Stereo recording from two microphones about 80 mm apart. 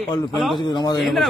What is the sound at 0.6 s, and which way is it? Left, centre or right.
Speech, left.